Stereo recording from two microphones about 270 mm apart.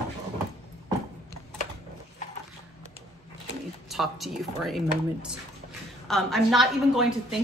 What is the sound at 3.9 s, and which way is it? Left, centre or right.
Speech, centre.